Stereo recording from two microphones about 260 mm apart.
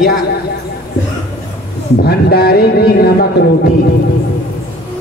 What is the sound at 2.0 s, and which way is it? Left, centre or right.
A man's voice, left.